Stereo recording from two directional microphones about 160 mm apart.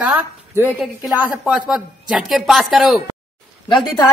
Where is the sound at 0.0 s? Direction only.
5° right (ahead or behind).